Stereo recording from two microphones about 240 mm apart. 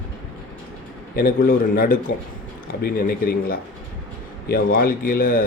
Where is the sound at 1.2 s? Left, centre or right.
Left.